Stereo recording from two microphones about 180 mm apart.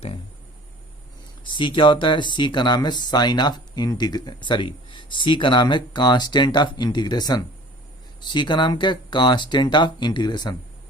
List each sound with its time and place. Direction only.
1.5 s speech: 25° left (ahead or behind)